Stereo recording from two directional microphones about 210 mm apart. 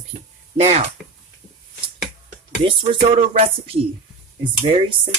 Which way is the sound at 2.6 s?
25° right (ahead or behind).